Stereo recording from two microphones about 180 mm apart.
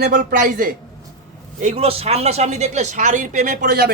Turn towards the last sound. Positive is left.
turn(degrees=-60)  # may be behind; listen again after turning